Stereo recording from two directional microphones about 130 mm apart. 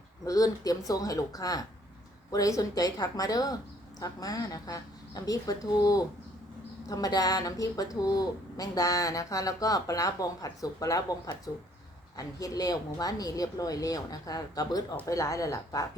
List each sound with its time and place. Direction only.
0.3 s speech: 25° left (ahead or behind)